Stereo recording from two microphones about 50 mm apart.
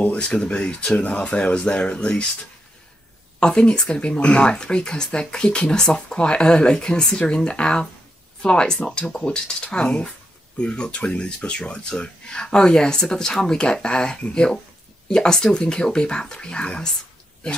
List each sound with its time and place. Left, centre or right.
0.2 s speech: centre
3.3 s speech: centre